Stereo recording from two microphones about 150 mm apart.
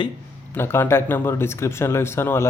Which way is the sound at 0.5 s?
15° left (ahead or behind).